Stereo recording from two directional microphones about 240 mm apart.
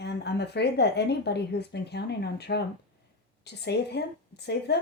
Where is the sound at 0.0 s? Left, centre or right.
Left.